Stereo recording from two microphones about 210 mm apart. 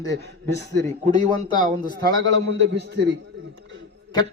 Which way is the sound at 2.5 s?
55° right (ahead or behind).